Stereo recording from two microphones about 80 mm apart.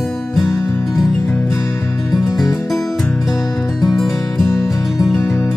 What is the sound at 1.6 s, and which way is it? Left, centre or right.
Music, left.